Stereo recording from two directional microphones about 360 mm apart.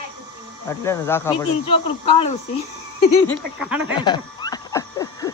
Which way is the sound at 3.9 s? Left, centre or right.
Centre.